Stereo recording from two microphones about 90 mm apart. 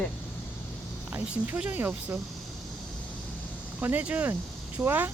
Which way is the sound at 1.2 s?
15° right (ahead or behind).